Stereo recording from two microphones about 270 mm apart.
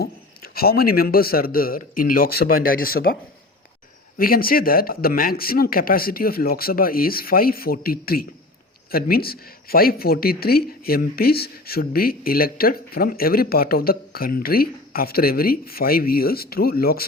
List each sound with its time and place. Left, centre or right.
0.0 s speech: left
4.2 s speech: left